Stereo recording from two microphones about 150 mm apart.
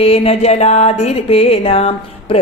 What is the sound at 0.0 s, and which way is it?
Music, 40° left (ahead or behind).